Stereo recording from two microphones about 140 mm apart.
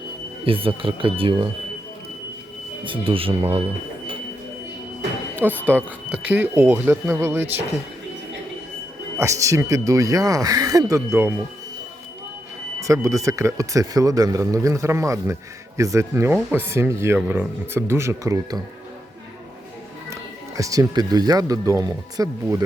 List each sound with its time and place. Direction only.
0.4 s speech: 40° right (ahead or behind)
2.8 s speech: 40° right (ahead or behind)
5.6 s speech: 15° right (ahead or behind)
9.1 s speech: 20° right (ahead or behind)
12.8 s speech: 20° right (ahead or behind)
20.6 s speech: 25° right (ahead or behind)